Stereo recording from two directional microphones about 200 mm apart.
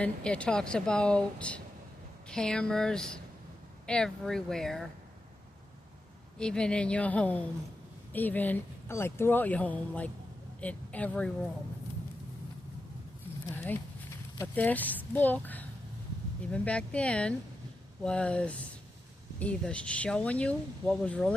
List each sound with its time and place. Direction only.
0.0 s speech: 5° left (ahead or behind)
6.4 s speech: 5° left (ahead or behind)
14.3 s speech: 10° left (ahead or behind)